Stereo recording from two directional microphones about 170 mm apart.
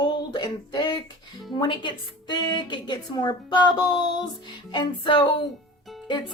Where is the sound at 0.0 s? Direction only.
25° left (ahead or behind).